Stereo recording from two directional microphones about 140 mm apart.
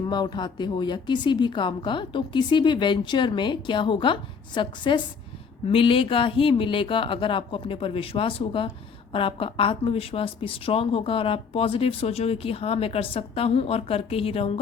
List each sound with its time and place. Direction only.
0.0 s a woman's voice: 30° left (ahead or behind)